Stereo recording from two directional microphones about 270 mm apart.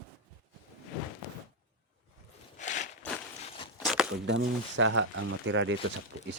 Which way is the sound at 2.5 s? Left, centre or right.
Left.